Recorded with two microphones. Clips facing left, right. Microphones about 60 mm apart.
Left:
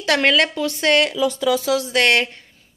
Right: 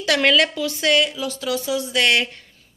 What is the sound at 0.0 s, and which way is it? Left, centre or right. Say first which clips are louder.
Speech: left 1 dB; left.